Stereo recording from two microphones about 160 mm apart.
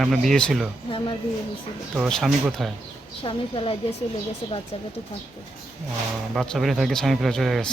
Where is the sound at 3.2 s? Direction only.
35° left (ahead or behind).